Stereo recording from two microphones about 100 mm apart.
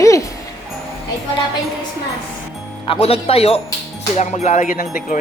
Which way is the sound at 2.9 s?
85° left.